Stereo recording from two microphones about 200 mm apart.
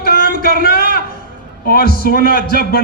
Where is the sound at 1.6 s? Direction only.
50° left (ahead or behind).